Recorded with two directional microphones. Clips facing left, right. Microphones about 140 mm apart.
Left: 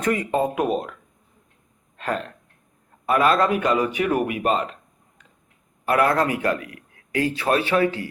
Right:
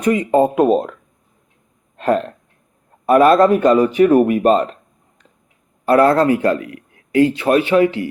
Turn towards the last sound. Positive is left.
turn(degrees=-10)  # may be behind; listen again after turning